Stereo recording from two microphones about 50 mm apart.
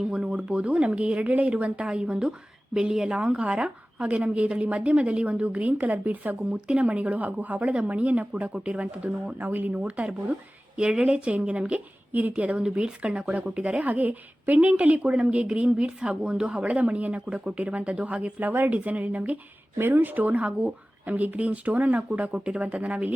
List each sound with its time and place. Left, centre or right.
0.0 s a woman's voice: centre; by 6.3 s right
6.5 s a woman's voice: right
9.4 s speech: right
10.8 s a woman's voice: centre
19.8 s a woman's voice: right